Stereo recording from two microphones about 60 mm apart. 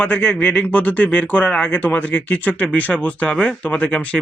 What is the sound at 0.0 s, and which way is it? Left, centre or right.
Speech, left.